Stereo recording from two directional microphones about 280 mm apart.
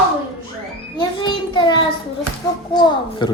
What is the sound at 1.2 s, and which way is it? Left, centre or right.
Speech, centre.